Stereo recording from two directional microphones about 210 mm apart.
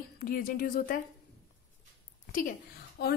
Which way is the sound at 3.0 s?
50° left (ahead or behind).